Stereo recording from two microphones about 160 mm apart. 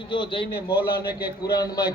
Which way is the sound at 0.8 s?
75° left (ahead or behind).